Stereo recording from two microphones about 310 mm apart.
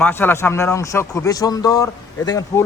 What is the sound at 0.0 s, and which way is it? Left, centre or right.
A man's voice, centre.